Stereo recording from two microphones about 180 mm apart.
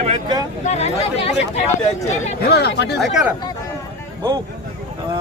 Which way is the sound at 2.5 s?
65° left (ahead or behind).